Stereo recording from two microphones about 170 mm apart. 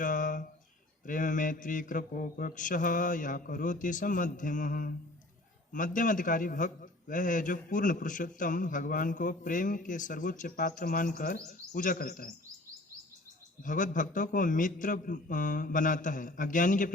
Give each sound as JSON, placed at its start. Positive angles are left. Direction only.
{"t": 0.0, "sound": "a sound", "side_deg": 50}
{"t": 1.0, "sound": "a man's voice", "side_deg": 50}
{"t": 13.6, "sound": "a man's voice", "side_deg": 50}